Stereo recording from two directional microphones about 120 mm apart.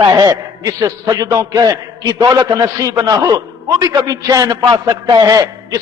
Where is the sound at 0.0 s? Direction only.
30° right (ahead or behind).